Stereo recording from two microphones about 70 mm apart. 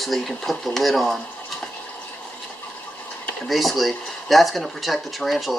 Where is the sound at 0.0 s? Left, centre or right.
Centre.